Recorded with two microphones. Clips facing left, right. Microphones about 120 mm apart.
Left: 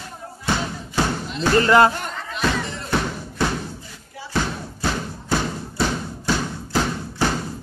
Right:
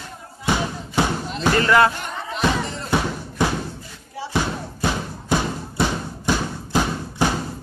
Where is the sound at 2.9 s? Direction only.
15° right (ahead or behind).